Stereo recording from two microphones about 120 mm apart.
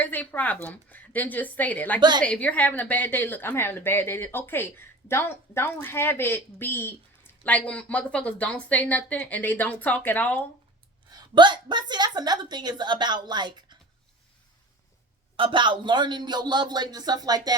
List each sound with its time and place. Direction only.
0.0 s a woman's voice: 15° left (ahead or behind)
2.0 s a woman's voice: 40° right (ahead or behind)
2.2 s a woman's voice: 10° left (ahead or behind)
11.1 s a woman's voice: 35° right (ahead or behind)
15.4 s a woman's voice: 45° right (ahead or behind)